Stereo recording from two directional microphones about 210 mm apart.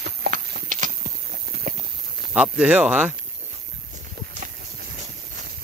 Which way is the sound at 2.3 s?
5° right (ahead or behind).